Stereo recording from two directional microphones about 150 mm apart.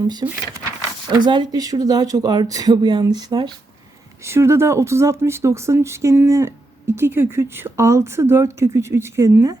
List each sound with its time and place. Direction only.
0.0 s speech: 25° right (ahead or behind)